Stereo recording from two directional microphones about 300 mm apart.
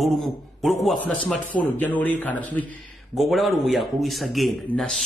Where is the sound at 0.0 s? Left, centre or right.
Centre.